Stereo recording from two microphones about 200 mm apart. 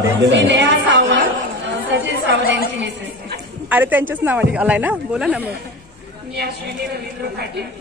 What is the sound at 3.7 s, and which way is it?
Speech, 10° right (ahead or behind).